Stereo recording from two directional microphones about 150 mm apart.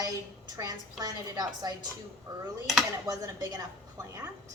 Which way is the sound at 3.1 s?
25° right (ahead or behind).